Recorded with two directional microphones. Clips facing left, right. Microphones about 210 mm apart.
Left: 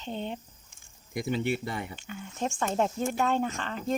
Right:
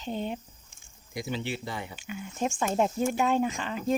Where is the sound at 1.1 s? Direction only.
55° left (ahead or behind).